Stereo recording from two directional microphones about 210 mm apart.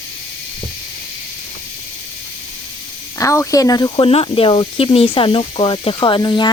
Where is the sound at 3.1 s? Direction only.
15° left (ahead or behind).